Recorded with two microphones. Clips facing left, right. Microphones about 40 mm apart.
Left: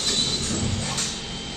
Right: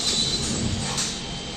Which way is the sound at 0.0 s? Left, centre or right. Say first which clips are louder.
Even; centre.